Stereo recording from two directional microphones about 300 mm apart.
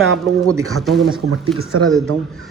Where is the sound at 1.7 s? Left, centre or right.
Right.